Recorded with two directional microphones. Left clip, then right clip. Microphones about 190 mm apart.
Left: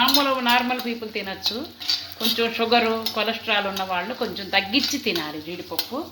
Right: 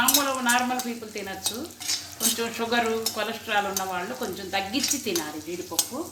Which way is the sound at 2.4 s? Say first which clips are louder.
Left 7 dB; 30° left (ahead or behind).